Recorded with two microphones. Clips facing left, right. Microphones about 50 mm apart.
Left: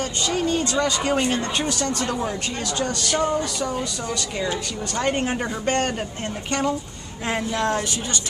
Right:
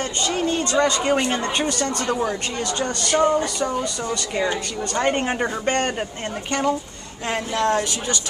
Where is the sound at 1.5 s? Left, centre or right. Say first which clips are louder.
Right 1 dB; centre.